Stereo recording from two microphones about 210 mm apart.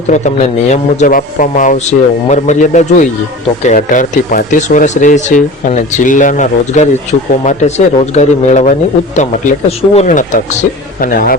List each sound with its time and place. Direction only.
0.1 s speech: 35° left (ahead or behind)